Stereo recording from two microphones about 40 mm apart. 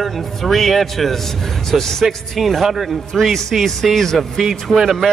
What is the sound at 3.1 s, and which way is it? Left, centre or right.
A man's voice, centre.